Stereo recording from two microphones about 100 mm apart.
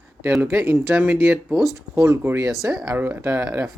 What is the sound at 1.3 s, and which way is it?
Speech, 5° right (ahead or behind).